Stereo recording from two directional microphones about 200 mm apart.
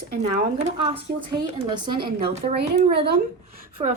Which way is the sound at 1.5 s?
20° right (ahead or behind).